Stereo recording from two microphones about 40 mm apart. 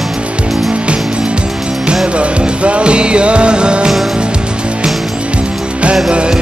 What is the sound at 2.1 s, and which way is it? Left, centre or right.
Music, right.